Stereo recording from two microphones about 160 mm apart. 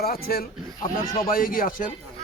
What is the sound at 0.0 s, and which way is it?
Speech, 70° left (ahead or behind).